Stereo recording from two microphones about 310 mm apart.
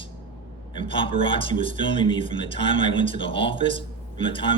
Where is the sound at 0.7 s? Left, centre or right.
Centre.